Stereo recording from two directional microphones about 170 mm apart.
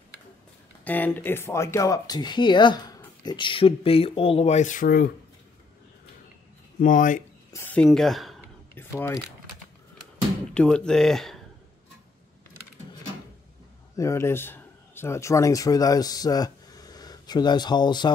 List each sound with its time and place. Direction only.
0.8 s speech: 10° left (ahead or behind); by 5.1 s 60° left (ahead or behind)
6.8 s speech: 50° left (ahead or behind)
7.5 s speech: 10° left (ahead or behind)
8.7 s speech: 15° left (ahead or behind)
10.5 s speech: 5° left (ahead or behind)
13.9 s speech: 15° left (ahead or behind)